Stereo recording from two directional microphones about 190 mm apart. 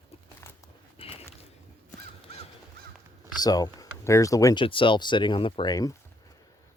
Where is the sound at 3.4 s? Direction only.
20° left (ahead or behind).